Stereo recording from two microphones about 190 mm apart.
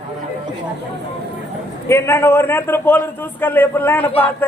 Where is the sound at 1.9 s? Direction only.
15° left (ahead or behind).